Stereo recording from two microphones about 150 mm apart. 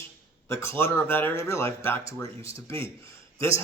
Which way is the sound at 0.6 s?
15° left (ahead or behind).